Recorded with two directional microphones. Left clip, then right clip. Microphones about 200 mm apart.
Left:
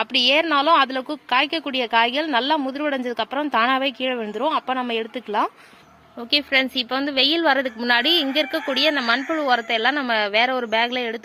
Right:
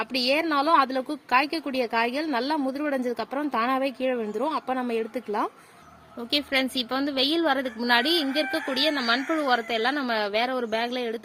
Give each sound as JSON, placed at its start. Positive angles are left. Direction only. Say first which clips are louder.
{"t": 0.0, "sound": "a woman's voice", "louder": "left 6 dB", "side_deg": 0}